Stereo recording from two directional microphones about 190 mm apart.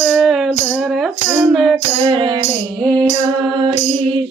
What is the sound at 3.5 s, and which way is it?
Music, 25° right (ahead or behind).